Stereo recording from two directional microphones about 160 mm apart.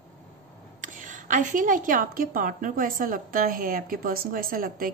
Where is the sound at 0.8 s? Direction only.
55° right (ahead or behind).